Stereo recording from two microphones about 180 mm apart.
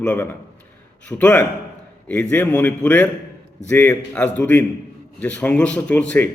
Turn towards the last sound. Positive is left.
turn(degrees=5)  # may be behind; listen again after turning